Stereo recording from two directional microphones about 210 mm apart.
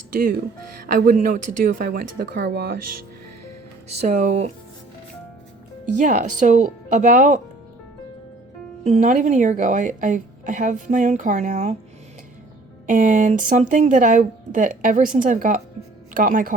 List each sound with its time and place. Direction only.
0.1 s a woman's voice: 40° right (ahead or behind)
3.8 s a woman's voice: 35° right (ahead or behind)
5.8 s a woman's voice: 35° right (ahead or behind)
8.8 s a woman's voice: 35° right (ahead or behind)
12.9 s a woman's voice: 40° right (ahead or behind)